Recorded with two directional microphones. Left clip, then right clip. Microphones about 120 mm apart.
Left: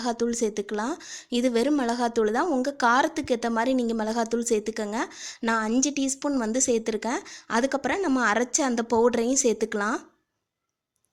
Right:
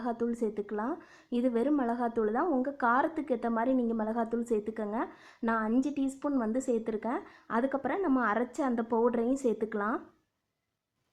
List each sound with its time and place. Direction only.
0.0 s a woman's voice: 40° left (ahead or behind)
3.9 s a woman's voice: 40° left (ahead or behind)